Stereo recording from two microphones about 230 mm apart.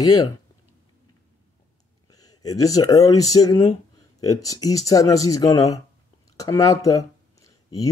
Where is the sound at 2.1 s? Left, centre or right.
Centre.